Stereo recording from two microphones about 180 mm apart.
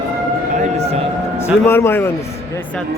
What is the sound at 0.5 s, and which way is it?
Siren, 40° right (ahead or behind).